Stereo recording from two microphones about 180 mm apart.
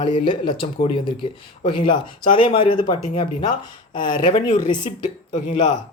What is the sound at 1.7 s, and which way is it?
Speech, 25° left (ahead or behind).